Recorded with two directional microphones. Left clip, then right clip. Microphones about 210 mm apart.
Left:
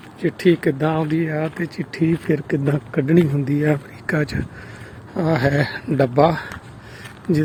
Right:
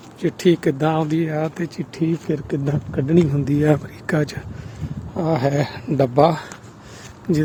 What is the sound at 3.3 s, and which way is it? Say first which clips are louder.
Speech: right 2 dB; 15° right (ahead or behind).